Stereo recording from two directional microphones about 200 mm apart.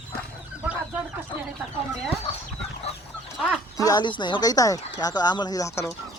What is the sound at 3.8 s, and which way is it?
Speech, 20° left (ahead or behind).